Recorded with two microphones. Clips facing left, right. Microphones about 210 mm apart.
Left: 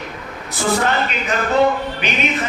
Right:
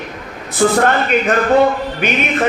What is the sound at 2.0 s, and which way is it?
Music, 50° right (ahead or behind).